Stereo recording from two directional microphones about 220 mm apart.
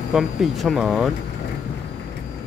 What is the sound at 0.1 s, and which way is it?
Speech, centre (ahead or behind).